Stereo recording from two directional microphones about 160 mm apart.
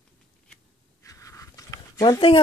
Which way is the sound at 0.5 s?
20° left (ahead or behind).